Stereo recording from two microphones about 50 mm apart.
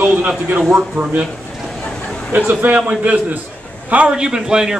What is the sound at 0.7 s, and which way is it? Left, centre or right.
Speech, right.